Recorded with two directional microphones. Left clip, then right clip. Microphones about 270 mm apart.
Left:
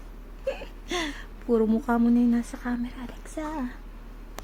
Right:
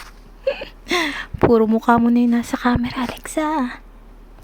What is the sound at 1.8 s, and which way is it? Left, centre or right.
Speech, right.